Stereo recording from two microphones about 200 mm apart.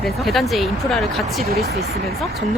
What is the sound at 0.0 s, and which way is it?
Speech, centre (ahead or behind).